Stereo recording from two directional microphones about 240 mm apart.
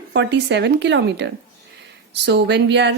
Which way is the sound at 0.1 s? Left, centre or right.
Right.